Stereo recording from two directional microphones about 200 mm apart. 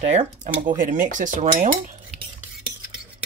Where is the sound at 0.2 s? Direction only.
40° right (ahead or behind).